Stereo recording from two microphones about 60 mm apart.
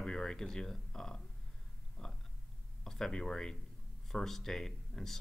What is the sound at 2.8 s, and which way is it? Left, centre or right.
Speech, centre.